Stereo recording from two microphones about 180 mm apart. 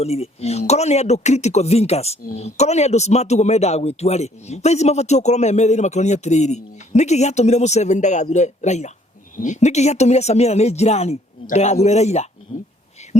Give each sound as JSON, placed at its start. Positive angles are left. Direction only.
{"t": 0.0, "sound": "speech", "side_deg": 35}